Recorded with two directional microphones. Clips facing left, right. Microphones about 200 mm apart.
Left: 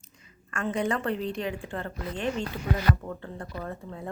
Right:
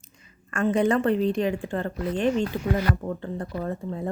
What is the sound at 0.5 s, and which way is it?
A woman's voice, 45° right (ahead or behind).